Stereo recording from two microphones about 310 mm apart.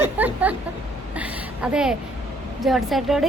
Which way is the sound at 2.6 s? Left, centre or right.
Centre.